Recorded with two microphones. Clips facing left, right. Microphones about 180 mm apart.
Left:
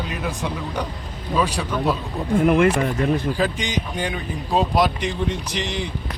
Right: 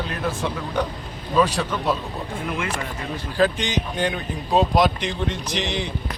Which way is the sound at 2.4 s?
55° left (ahead or behind).